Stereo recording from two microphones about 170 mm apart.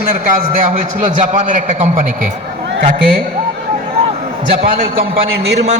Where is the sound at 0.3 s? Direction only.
50° right (ahead or behind).